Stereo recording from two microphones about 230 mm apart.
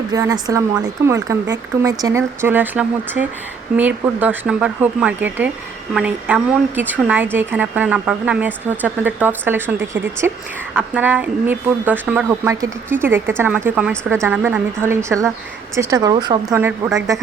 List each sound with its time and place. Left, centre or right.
0.1 s a woman's voice: centre